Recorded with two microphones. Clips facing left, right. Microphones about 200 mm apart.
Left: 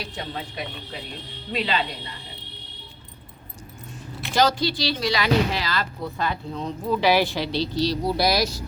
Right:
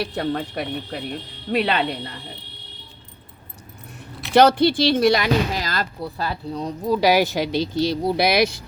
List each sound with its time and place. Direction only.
0.0 s speech: 60° right (ahead or behind)
4.4 s speech: 60° right (ahead or behind)
8.1 s speech: 60° right (ahead or behind)